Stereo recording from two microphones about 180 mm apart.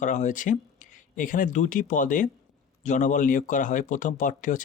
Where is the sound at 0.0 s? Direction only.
45° left (ahead or behind).